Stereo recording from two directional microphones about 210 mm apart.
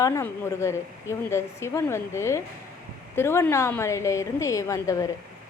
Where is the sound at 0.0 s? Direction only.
15° left (ahead or behind).